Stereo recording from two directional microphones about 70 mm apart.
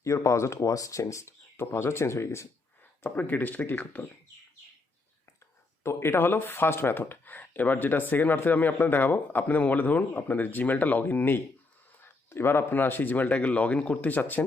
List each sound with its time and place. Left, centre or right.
0.0 s speech: left
3.0 s speech: left
5.8 s speech: left